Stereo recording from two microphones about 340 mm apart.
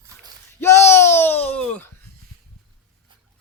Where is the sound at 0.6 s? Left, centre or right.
Centre.